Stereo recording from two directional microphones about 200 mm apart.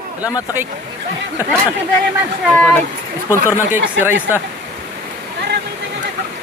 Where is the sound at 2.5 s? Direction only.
10° left (ahead or behind).